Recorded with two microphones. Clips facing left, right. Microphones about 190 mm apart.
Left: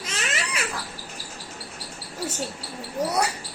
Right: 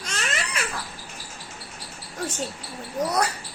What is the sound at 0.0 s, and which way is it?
Crying, 5° left (ahead or behind).